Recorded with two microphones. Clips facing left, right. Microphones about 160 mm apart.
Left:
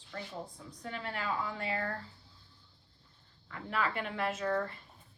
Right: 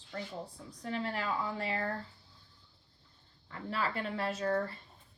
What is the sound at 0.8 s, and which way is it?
Speech, 35° right (ahead or behind).